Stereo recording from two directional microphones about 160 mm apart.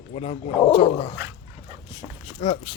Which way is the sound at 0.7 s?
30° left (ahead or behind).